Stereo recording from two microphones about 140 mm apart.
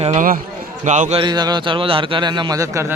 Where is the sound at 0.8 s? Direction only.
60° right (ahead or behind).